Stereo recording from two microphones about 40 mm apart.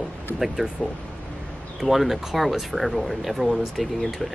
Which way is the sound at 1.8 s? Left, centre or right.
Centre.